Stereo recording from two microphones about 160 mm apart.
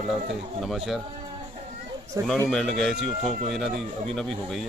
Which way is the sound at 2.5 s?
5° left (ahead or behind).